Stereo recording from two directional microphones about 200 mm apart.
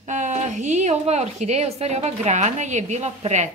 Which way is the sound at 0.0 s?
40° right (ahead or behind).